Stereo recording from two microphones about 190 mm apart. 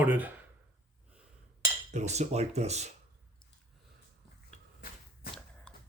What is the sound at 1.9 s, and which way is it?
Speech, 35° right (ahead or behind).